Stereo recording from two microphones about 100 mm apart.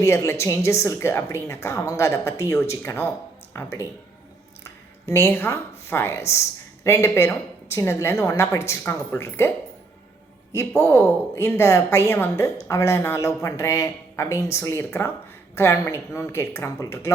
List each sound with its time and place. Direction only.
0.0 s speech: 30° left (ahead or behind)
11.3 s speech: 25° left (ahead or behind)